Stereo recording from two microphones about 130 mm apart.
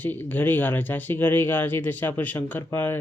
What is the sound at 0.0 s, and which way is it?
Speech, 15° left (ahead or behind).